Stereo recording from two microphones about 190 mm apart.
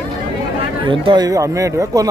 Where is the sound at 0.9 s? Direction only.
25° right (ahead or behind).